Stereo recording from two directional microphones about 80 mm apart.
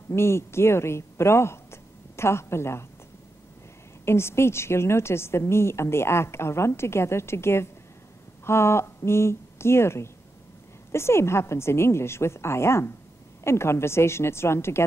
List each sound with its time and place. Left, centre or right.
0.1 s speech: left
4.0 s a woman's voice: left